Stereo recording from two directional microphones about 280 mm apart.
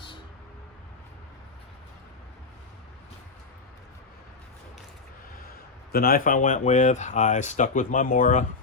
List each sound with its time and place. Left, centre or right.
5.9 s speech: left